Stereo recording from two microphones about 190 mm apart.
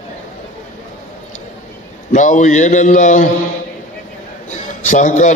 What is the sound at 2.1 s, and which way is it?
A man's voice, 40° left (ahead or behind).